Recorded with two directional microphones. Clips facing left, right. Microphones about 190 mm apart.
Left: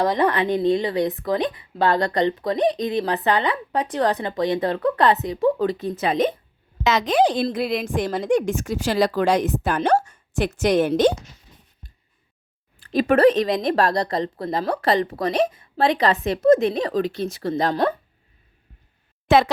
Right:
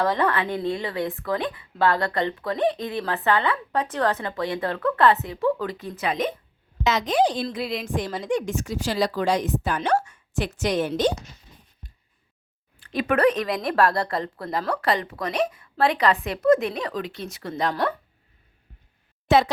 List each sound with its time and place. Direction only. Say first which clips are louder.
0.0 s speech: left 3 dB; 15° left (ahead or behind)
6.8 s a woman's voice: left 3 dB; 90° left; by 7.4 s 70° left (ahead or behind)
7.4 s a woman's voice: left 5 dB; 50° left (ahead or behind)
12.8 s speech: left 5 dB; 35° left (ahead or behind)